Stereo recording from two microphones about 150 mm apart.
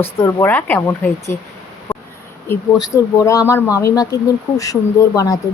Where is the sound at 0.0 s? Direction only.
15° left (ahead or behind).